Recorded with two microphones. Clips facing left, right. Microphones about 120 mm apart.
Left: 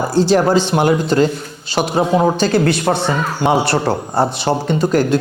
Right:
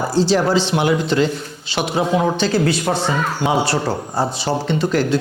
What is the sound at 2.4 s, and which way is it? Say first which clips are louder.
Speech: left 3 dB; 60° left (ahead or behind).